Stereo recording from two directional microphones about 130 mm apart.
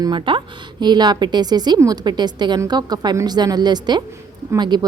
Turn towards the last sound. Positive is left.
turn(degrees=-35)  # may be behind; listen again after turning